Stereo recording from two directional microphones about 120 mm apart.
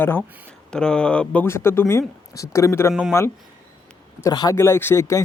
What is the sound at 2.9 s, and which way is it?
Speech, 5° right (ahead or behind).